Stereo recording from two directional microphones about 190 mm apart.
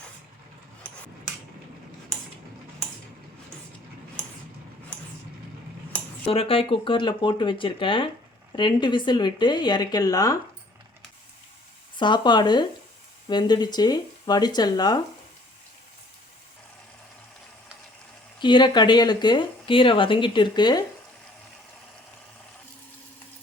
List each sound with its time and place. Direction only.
6.2 s speech: 30° left (ahead or behind)
11.9 s speech: 25° left (ahead or behind)
18.3 s speech: 25° left (ahead or behind)